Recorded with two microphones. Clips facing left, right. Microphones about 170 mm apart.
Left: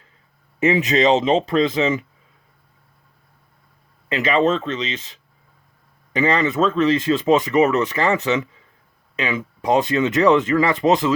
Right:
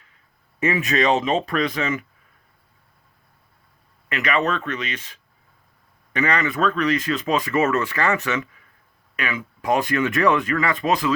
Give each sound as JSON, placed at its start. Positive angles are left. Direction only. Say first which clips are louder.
{"t": 0.6, "sound": "speech", "louder": "left 4 dB", "side_deg": 20}
{"t": 4.1, "sound": "speech", "louder": "left 5 dB", "side_deg": 25}
{"t": 6.1, "sound": "speech", "louder": "left 4 dB", "side_deg": 25}